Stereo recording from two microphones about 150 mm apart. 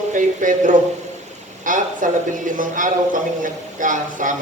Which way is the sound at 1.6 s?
60° right (ahead or behind).